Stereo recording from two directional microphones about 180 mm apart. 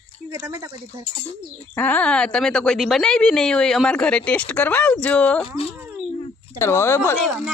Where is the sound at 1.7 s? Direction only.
10° left (ahead or behind).